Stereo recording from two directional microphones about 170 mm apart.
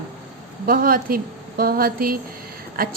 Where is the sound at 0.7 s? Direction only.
55° right (ahead or behind).